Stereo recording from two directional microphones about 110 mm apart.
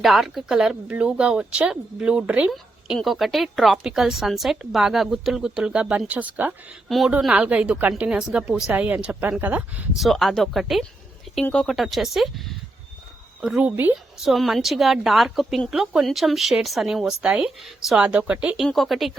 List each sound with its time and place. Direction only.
0.0 s speech: centre (ahead or behind)
2.5 s a woman's voice: centre (ahead or behind)
6.8 s a woman's voice: centre (ahead or behind); by 9.8 s 15° right (ahead or behind)
10.0 s a woman's voice: centre (ahead or behind)
13.7 s speech: 15° right (ahead or behind)
14.2 s a woman's voice: centre (ahead or behind)
18.0 s speech: 10° right (ahead or behind)
18.6 s a woman's voice: centre (ahead or behind)